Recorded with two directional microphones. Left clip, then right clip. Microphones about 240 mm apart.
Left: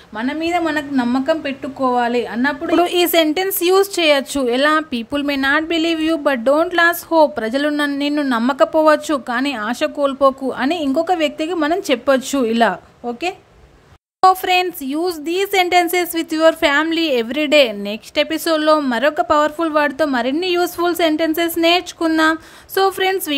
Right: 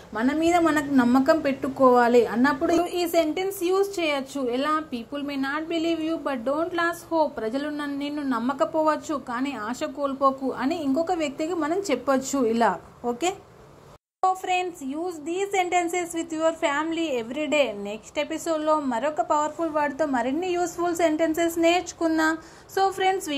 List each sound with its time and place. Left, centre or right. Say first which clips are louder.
0.2 s a woman's voice: left 2 dB; centre
3.0 s a woman's voice: left 8 dB; left
14.2 s a woman's voice: left 10 dB; left